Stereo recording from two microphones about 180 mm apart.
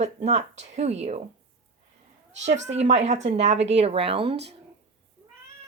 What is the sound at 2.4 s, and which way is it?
Speech, 40° right (ahead or behind).